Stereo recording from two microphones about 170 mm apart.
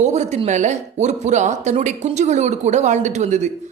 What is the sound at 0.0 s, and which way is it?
Speech, 40° right (ahead or behind).